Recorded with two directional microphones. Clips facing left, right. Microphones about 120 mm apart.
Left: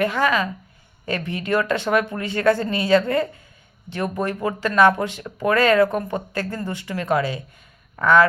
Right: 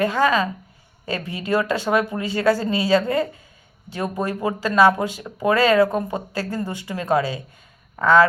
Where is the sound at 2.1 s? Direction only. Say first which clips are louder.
Right 2 dB; 20° right (ahead or behind).